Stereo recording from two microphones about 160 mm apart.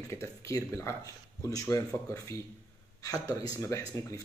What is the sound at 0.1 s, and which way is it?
Speech, 20° left (ahead or behind).